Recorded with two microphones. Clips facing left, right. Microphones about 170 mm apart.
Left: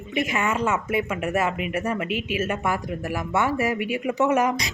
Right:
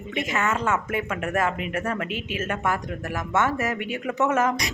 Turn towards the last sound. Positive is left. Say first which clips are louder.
# left 1 dB
turn(degrees=15)  # may be behind; listen again after turning